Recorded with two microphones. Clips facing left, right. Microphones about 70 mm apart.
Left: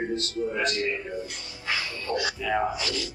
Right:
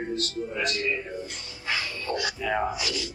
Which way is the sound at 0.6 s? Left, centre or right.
Left.